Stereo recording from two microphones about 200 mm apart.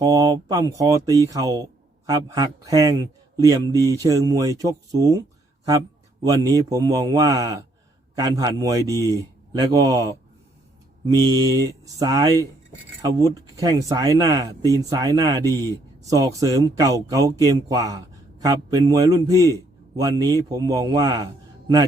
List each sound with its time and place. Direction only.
0.0 s speech: 20° right (ahead or behind)
6.2 s a man's voice: 20° right (ahead or behind)